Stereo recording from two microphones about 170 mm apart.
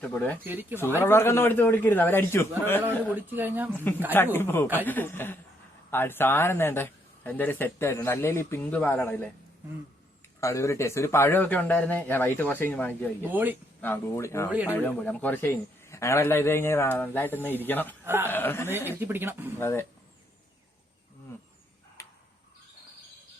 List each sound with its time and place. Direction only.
0.0 s speech: 10° left (ahead or behind)
0.4 s a woman's voice: 10° right (ahead or behind)
1.0 s speech: 15° left (ahead or behind)
2.8 s a woman's voice: 10° right (ahead or behind)
4.1 s speech: 15° left (ahead or behind)
10.4 s speech: 15° left (ahead or behind)
13.2 s a woman's voice: 10° right (ahead or behind)
13.8 s speech: 15° left (ahead or behind)
18.0 s speech: 15° right (ahead or behind)
18.3 s speech: 10° left (ahead or behind)
18.9 s a woman's voice: 15° right (ahead or behind)
19.5 s speech: 15° left (ahead or behind)